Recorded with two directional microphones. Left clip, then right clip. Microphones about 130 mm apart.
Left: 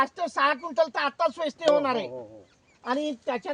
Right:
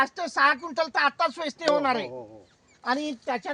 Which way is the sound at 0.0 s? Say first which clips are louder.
Right 2 dB; 5° left (ahead or behind).